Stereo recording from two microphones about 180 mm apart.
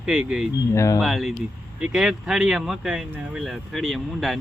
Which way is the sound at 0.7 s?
15° left (ahead or behind).